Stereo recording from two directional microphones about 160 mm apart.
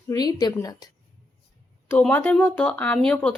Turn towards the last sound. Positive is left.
turn(degrees=5)  # may be behind; listen again after turning